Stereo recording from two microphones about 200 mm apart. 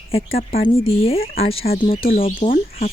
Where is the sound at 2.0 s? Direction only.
45° left (ahead or behind).